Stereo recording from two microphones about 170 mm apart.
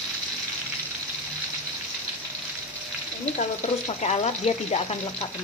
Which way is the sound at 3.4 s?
40° left (ahead or behind).